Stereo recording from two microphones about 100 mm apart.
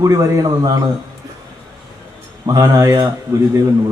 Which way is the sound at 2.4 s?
35° right (ahead or behind).